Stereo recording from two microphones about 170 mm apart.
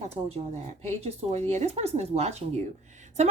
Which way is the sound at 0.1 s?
40° right (ahead or behind).